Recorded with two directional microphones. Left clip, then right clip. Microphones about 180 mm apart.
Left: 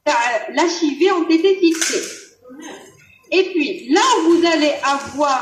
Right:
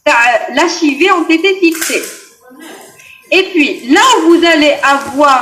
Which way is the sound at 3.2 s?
25° right (ahead or behind).